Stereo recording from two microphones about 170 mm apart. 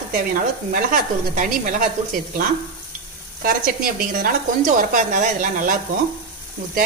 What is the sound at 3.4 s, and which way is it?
Speech, 55° right (ahead or behind).